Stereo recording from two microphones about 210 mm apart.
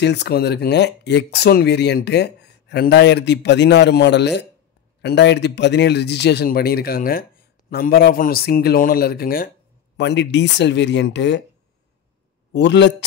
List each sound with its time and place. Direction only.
0.0 s speech: 55° left (ahead or behind)
9.9 s speech: 55° left (ahead or behind)
12.5 s speech: 55° left (ahead or behind)